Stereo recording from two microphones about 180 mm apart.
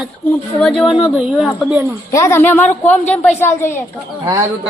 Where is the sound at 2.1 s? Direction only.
15° left (ahead or behind).